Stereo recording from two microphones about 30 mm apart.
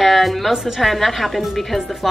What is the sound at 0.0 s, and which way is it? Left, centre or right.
A woman's voice, centre.